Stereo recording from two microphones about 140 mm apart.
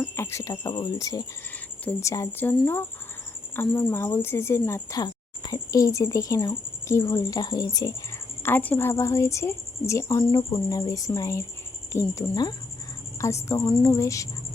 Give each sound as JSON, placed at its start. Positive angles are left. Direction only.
{"t": 0.0, "sound": "speech", "side_deg": 20}
{"t": 1.8, "sound": "speech", "side_deg": 10}
{"t": 2.0, "sound": "speech", "side_deg": 20}
{"t": 3.6, "sound": "speech", "side_deg": 15}
{"t": 8.4, "sound": "a woman's voice", "side_deg": 15}